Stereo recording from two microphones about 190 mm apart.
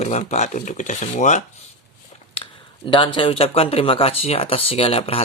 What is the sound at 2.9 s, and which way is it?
Speech, 25° left (ahead or behind).